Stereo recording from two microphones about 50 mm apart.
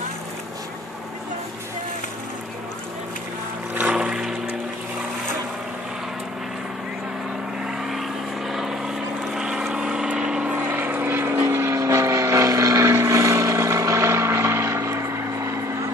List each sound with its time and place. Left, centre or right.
3.8 s a sound: centre
7.6 s vehicle: centre
10.5 s vehicle: right
11.5 s vehicle: right